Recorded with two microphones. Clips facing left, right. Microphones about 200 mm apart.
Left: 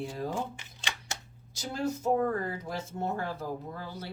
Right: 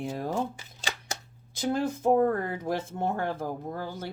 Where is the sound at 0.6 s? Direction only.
35° right (ahead or behind).